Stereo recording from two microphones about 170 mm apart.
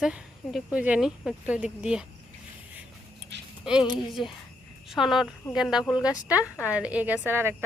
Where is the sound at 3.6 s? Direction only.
5° right (ahead or behind).